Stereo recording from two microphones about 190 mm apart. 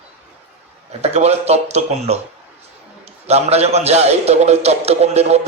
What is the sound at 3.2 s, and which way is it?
A man's voice, 35° right (ahead or behind).